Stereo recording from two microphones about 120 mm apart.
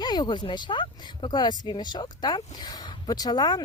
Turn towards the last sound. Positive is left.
turn(degrees=35)  # may be behind; listen again after turning